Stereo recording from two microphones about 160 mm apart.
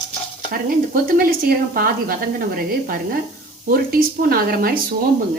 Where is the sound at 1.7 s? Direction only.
65° right (ahead or behind).